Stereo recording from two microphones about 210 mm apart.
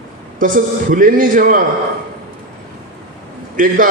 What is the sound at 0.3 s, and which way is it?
A man's voice, 40° right (ahead or behind).